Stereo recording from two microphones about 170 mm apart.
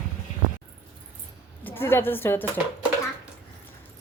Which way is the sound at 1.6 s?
15° left (ahead or behind).